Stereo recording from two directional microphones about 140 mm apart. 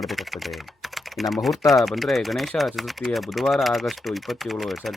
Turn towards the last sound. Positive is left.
turn(degrees=0)  # may be behind; listen again after turning